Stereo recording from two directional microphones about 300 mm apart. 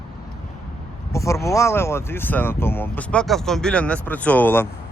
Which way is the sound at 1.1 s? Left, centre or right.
Centre.